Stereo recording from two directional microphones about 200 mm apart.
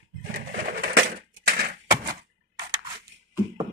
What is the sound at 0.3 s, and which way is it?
Pigeon, 45° right (ahead or behind).